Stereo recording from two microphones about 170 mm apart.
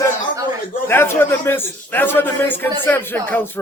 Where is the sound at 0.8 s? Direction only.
15° left (ahead or behind).